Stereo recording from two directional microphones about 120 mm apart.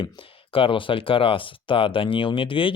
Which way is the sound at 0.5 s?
50° left (ahead or behind).